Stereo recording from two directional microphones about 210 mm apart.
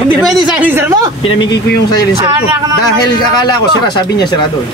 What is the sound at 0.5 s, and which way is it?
Speech, 10° right (ahead or behind).